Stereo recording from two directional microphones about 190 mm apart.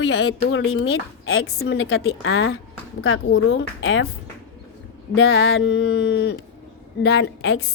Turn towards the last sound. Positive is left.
turn(degrees=65)  # may be behind; listen again after turning